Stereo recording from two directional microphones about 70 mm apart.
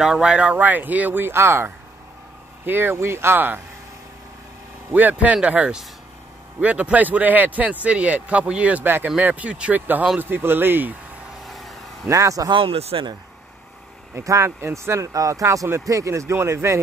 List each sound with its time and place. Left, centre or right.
0.0 s speech: centre
0.6 s speech: right
4.9 s speech: right
11.4 s vehicle: centre
12.1 s speech: right
14.2 s speech: right
15.1 s speech: right